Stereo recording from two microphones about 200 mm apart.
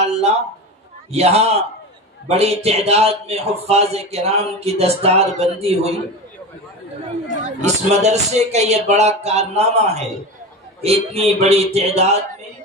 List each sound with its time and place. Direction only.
0.0 s a sound: 30° right (ahead or behind)
1.1 s speech: 30° right (ahead or behind)
7.6 s speech: 35° right (ahead or behind)